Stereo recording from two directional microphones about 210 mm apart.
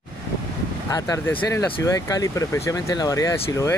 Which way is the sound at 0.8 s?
15° left (ahead or behind).